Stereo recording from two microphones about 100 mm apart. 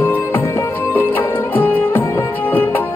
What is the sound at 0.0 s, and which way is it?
Music, 20° left (ahead or behind).